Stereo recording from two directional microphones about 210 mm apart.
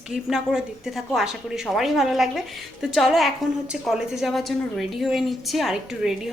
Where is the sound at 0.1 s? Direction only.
5° right (ahead or behind).